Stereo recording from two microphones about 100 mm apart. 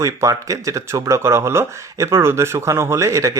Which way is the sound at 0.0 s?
30° right (ahead or behind).